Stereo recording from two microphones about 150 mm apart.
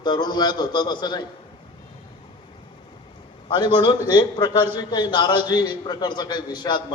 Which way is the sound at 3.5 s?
30° left (ahead or behind).